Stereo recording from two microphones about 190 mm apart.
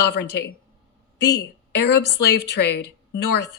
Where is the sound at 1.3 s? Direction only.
60° left (ahead or behind).